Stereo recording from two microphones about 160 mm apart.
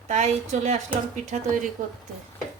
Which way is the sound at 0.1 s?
50° right (ahead or behind).